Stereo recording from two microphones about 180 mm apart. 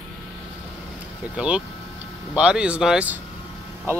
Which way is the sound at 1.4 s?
5° right (ahead or behind).